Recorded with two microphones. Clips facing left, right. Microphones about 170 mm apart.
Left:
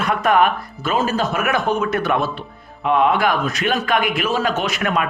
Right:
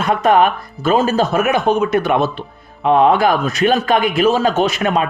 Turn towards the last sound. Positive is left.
turn(degrees=-25)  # may be behind; listen again after turning